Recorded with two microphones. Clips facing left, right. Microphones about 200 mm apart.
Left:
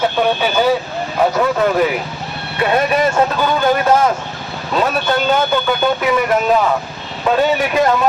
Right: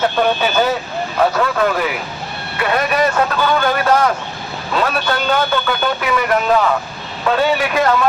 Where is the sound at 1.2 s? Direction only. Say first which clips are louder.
Left 1 dB; 20° left (ahead or behind).